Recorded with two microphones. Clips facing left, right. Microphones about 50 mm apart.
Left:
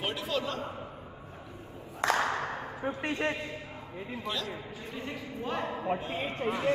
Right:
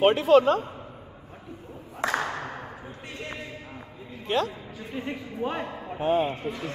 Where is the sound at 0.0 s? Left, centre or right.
Right.